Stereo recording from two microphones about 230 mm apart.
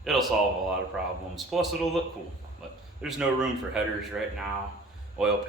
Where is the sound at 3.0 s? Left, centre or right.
Centre.